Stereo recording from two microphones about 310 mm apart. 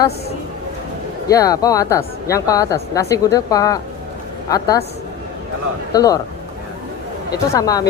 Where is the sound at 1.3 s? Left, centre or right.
Centre.